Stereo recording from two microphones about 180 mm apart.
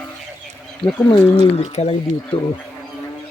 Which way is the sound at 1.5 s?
35° left (ahead or behind).